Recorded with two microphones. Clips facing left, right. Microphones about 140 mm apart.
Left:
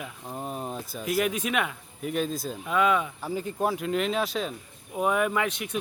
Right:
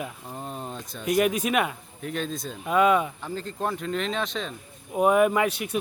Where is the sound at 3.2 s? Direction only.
10° left (ahead or behind).